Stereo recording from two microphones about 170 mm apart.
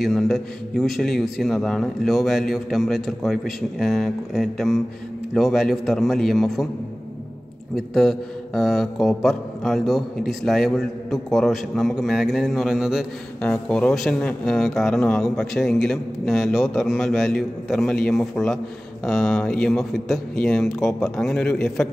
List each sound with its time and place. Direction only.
0.0 s a man's voice: 5° left (ahead or behind)
7.7 s a man's voice: centre (ahead or behind)